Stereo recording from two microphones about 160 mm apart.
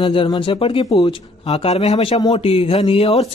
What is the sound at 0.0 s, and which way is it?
A man's voice, 30° left (ahead or behind).